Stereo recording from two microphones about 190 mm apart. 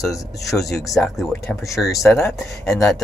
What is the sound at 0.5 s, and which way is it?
Speech, centre (ahead or behind).